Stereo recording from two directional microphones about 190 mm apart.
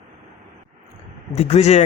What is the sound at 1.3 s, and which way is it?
Speech, 35° left (ahead or behind).